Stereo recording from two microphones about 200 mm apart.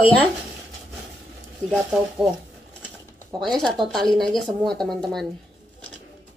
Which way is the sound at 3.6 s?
Centre (ahead or behind).